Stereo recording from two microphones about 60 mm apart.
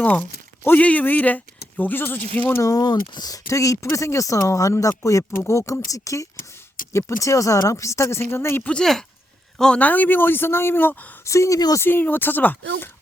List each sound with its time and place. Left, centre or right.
0.0 s speech: left
2.6 s speech: left
8.8 s speech: centre
9.7 s speech: left
11.2 s speech: left
11.8 s speech: left